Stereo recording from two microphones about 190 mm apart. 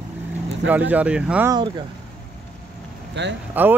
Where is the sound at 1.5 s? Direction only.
20° right (ahead or behind).